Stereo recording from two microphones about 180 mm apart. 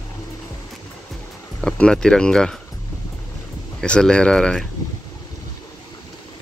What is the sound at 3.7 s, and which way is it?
Speech, 5° left (ahead or behind).